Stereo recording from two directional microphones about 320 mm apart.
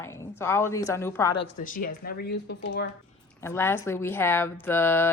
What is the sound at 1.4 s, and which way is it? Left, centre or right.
Speech, left.